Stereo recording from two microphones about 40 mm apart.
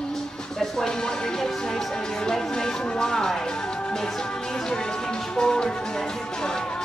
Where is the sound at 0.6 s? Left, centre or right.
Centre.